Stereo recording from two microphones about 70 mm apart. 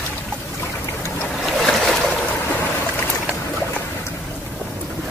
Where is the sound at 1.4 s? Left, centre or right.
Centre.